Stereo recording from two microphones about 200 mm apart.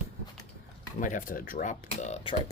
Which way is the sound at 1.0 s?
40° left (ahead or behind).